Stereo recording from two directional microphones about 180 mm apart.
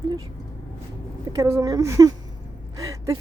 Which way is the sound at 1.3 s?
15° right (ahead or behind).